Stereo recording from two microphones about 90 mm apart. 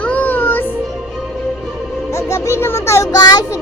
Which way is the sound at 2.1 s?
35° left (ahead or behind).